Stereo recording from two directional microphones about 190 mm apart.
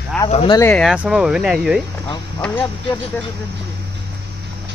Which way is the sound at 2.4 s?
10° left (ahead or behind).